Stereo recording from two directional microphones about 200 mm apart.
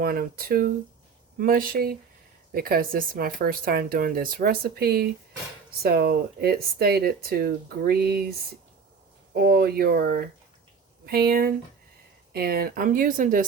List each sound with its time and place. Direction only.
0.0 s speech: 50° right (ahead or behind)
9.3 s speech: 55° right (ahead or behind)